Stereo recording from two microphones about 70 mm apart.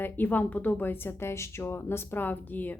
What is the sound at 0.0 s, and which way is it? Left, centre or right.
Speech, left.